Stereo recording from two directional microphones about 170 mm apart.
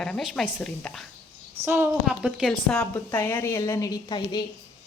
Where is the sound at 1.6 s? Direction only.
10° right (ahead or behind); by 4.4 s 25° left (ahead or behind).